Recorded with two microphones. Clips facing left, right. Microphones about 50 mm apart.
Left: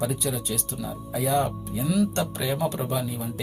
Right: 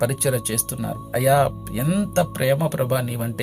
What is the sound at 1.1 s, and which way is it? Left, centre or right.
Speech, right.